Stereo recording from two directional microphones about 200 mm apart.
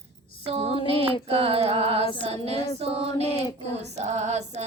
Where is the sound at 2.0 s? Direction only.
25° left (ahead or behind).